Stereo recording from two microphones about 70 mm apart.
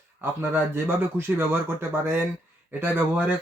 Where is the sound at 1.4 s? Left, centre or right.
Right.